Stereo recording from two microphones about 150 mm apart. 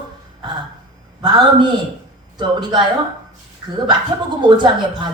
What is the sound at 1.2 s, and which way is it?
A man's voice, 30° right (ahead or behind).